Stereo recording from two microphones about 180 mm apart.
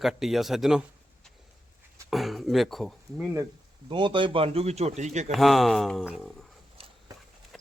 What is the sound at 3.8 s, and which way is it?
A man's voice, 25° right (ahead or behind).